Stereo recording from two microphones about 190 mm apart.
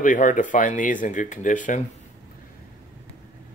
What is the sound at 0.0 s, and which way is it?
Speech, 45° left (ahead or behind).